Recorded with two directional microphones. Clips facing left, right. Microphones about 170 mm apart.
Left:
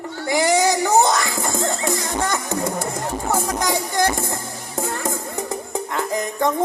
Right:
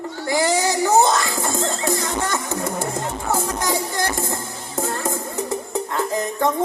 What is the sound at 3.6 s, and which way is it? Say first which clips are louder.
Music: left 2 dB; 15° left (ahead or behind).